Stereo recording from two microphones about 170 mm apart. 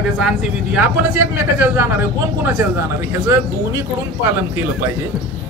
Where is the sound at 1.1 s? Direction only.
15° right (ahead or behind).